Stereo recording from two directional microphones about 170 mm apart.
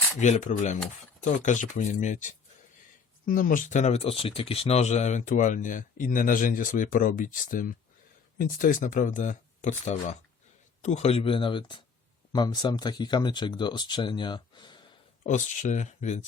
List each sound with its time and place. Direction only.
0.2 s speech: 45° left (ahead or behind); by 14.8 s 25° left (ahead or behind)
15.3 s speech: 45° left (ahead or behind)